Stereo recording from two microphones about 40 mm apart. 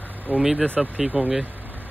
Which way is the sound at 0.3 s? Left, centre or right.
Right.